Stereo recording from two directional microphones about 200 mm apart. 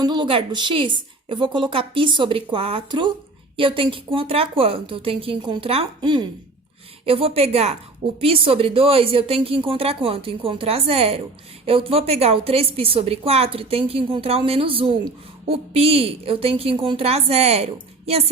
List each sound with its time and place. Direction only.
0.0 s a woman's voice: 20° right (ahead or behind)